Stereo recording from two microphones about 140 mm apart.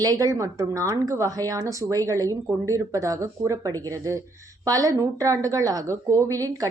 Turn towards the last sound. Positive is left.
turn(degrees=-25)  # may be behind; listen again after turning